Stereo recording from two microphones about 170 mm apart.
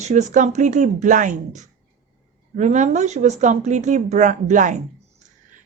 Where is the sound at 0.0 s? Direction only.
45° right (ahead or behind).